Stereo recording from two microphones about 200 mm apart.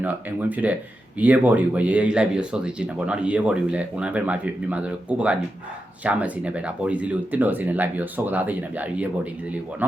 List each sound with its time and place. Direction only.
0.0 s speech: 10° right (ahead or behind)